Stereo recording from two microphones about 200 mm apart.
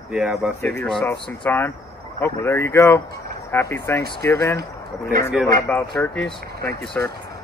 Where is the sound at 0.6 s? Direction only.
10° left (ahead or behind).